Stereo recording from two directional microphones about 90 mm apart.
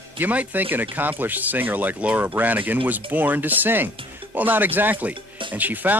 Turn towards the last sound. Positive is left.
turn(degrees=-20)  # may be behind; listen again after turning